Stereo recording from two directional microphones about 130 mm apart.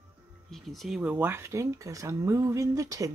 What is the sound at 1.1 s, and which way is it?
Speech, 15° right (ahead or behind).